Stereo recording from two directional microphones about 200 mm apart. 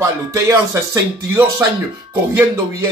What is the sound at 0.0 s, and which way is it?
Speech, 15° right (ahead or behind).